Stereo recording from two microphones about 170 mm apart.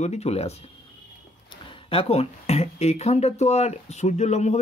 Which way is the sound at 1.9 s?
35° left (ahead or behind).